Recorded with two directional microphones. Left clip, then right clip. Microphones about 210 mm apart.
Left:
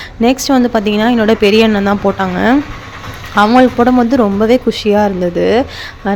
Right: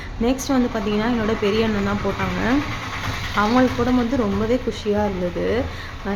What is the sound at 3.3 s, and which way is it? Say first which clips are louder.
Speech: left 10 dB; 40° left (ahead or behind).